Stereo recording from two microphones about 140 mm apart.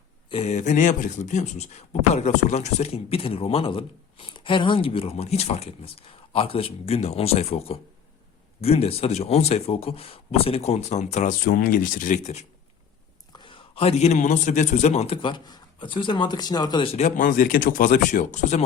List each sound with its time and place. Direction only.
0.3 s speech: 45° left (ahead or behind)
11.3 s speech: 90° left; by 12.5 s 55° left (ahead or behind)
13.3 s a man's voice: 35° left (ahead or behind)
16.9 s speech: 65° left (ahead or behind)